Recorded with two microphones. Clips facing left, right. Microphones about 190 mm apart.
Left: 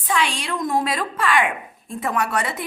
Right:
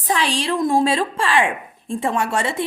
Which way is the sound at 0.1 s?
35° right (ahead or behind).